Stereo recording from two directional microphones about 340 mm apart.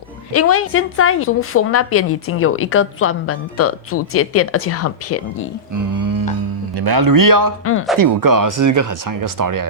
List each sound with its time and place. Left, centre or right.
0.3 s a woman's voice: left
5.7 s a sound: right
6.8 s speech: right
7.6 s a woman's voice: left
7.9 s speech: right